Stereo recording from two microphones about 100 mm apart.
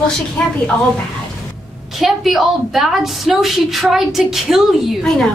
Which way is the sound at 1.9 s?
Centre (ahead or behind).